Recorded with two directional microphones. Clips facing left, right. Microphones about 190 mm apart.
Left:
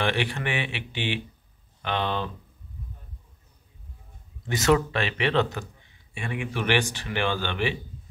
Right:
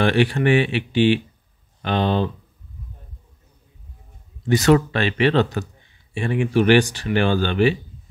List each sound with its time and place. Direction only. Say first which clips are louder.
0.0 s speech: right 9 dB; 40° right (ahead or behind)
4.5 s speech: right 6 dB; 35° right (ahead or behind)